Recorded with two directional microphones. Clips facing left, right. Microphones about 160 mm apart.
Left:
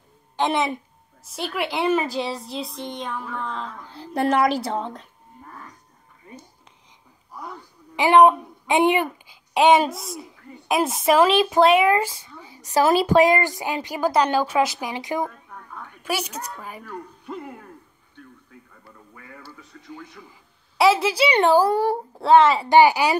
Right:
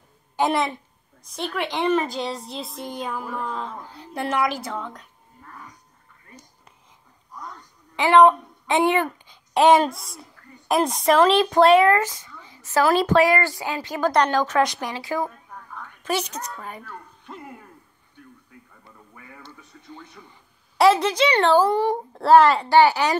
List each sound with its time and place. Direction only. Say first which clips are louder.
0.4 s a woman's voice: even; centre (ahead or behind)
3.9 s a woman's voice: left 6 dB; 35° left (ahead or behind)
7.3 s a sound: left 3 dB; 10° left (ahead or behind)
9.5 s a child's voice: even; centre (ahead or behind)
12.3 s a sound: left 3 dB; 15° left (ahead or behind)
12.9 s a woman's voice: left 2 dB; 10° left (ahead or behind)
14.9 s a woman's voice: left 1 dB; 20° left (ahead or behind)
19.4 s a woman's voice: left 2 dB; 5° left (ahead or behind)
22.7 s a woman's voice: left 1 dB; 15° left (ahead or behind)